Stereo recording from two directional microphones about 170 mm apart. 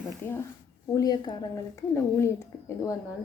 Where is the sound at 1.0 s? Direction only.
25° left (ahead or behind).